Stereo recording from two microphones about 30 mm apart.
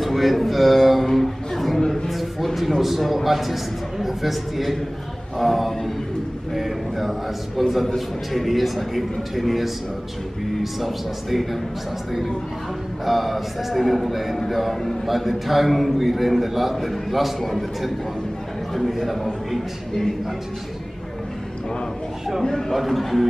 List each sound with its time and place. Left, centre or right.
0.0 s speech: centre
1.1 s a sound: centre
3.1 s a man's voice: centre
13.0 s a man's voice: centre
22.4 s a man's voice: centre
22.7 s a man's voice: centre